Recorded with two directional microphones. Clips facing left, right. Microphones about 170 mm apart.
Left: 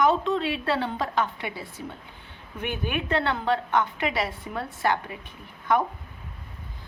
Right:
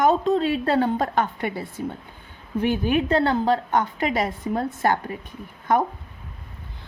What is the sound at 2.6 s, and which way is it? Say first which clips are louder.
A woman's voice: right 8 dB; 35° right (ahead or behind).